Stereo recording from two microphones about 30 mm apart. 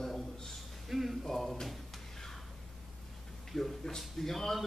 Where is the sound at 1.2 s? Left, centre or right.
Centre.